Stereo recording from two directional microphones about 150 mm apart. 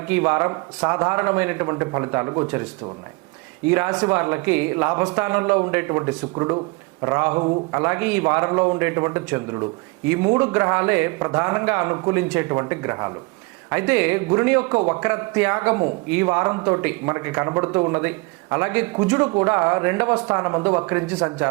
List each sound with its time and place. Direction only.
0.1 s a man's voice: 15° right (ahead or behind)
3.7 s a man's voice: 10° right (ahead or behind)